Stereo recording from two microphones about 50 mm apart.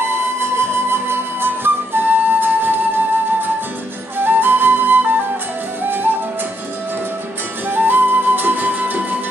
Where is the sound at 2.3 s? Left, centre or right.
Right.